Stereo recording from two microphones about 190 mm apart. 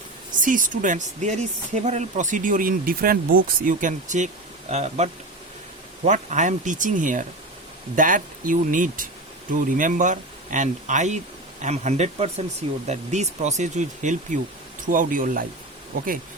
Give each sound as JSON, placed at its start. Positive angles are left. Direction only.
{"t": 0.3, "sound": "speech", "side_deg": -45}